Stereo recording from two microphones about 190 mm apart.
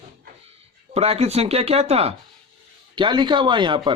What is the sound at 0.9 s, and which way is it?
Speech, 35° right (ahead or behind).